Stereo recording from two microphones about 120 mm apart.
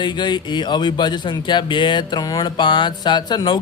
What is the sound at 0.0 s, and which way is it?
Speech, 40° left (ahead or behind).